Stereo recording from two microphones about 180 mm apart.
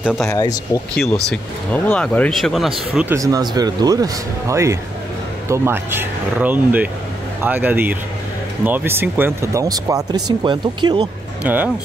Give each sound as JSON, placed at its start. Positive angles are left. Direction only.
{"t": 0.0, "sound": "speech", "side_deg": 0}
{"t": 0.3, "sound": "speech", "side_deg": 20}
{"t": 0.9, "sound": "speech", "side_deg": 5}
{"t": 3.2, "sound": "speech", "side_deg": -20}
{"t": 11.4, "sound": "speech", "side_deg": -10}